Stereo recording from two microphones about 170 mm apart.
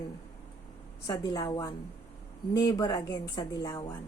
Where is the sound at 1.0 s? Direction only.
20° left (ahead or behind).